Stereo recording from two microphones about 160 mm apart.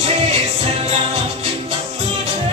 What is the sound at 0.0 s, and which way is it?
Music, 40° right (ahead or behind).